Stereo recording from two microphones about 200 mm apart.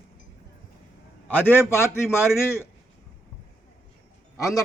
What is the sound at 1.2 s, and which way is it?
A man's voice, 10° left (ahead or behind).